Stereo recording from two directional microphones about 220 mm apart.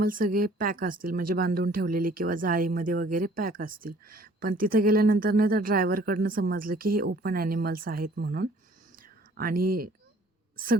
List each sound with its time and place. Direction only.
0.0 s speech: 40° right (ahead or behind)